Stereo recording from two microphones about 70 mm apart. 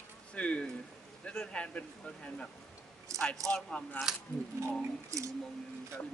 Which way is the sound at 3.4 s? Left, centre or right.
Centre.